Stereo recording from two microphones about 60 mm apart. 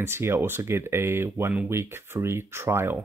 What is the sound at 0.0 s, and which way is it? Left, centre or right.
Speech, right.